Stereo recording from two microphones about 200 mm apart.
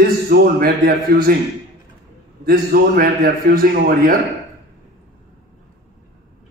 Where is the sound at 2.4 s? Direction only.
45° right (ahead or behind).